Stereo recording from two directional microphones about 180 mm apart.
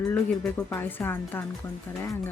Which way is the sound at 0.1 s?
10° left (ahead or behind).